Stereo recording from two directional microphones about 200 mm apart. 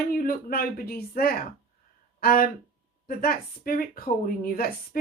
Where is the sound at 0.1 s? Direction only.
45° left (ahead or behind).